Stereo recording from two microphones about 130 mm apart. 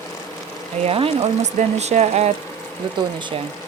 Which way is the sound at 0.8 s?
50° right (ahead or behind).